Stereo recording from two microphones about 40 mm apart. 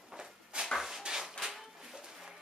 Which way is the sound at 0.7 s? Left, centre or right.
Centre.